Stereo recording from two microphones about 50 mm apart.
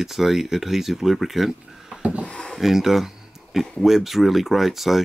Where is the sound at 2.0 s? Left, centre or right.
Right.